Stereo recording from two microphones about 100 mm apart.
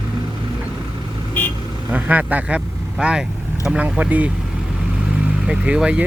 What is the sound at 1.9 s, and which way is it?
Speech, 15° right (ahead or behind).